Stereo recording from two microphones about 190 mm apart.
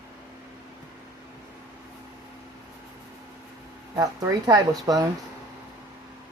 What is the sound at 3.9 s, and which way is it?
Speech, 20° right (ahead or behind).